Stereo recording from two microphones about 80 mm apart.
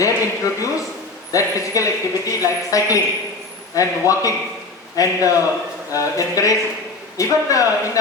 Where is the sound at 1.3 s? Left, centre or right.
Left.